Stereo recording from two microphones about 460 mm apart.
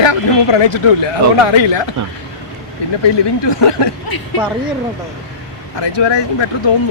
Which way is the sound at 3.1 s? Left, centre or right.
Left.